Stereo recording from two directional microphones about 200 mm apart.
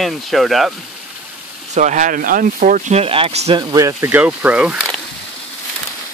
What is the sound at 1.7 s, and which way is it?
Speech, 40° right (ahead or behind).